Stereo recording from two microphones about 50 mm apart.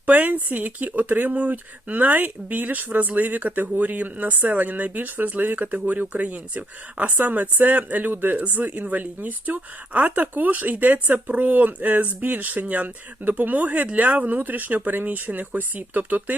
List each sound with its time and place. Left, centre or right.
0.0 s speech: right